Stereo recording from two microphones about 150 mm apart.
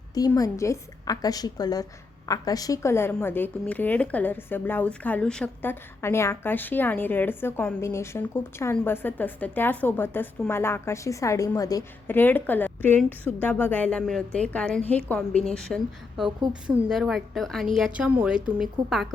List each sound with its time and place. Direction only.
0.1 s a woman's voice: 25° left (ahead or behind); by 5.7 s 5° left (ahead or behind)
6.0 s a woman's voice: 15° left (ahead or behind)
12.0 s a woman's voice: 15° left (ahead or behind); by 19.0 s 5° right (ahead or behind)